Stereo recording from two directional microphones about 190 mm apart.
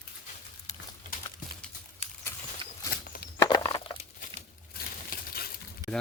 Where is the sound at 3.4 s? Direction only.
20° left (ahead or behind).